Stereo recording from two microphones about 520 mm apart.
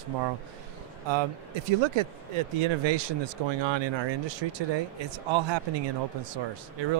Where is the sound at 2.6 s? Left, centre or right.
Right.